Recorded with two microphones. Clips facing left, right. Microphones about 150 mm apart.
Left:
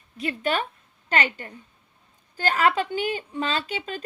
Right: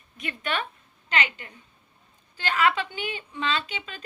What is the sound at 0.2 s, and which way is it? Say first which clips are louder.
A woman's voice: left 5 dB; 35° left (ahead or behind).